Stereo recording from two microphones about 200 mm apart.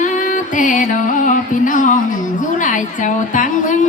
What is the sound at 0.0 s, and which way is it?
Music, 40° left (ahead or behind).